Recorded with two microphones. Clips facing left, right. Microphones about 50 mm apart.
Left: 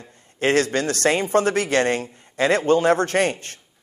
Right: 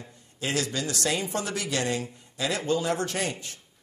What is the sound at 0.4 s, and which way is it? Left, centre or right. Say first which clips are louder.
A man's voice: left 10 dB; left.